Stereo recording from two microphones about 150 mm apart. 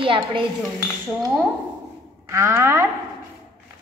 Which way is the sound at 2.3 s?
20° right (ahead or behind).